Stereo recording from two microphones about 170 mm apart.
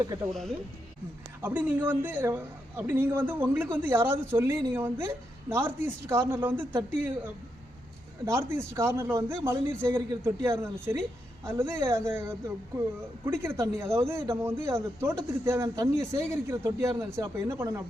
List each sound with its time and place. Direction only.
1.4 s a man's voice: 10° right (ahead or behind)
8.2 s a man's voice: 15° right (ahead or behind)